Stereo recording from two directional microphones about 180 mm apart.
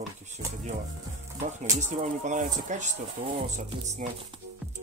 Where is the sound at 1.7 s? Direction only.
40° right (ahead or behind).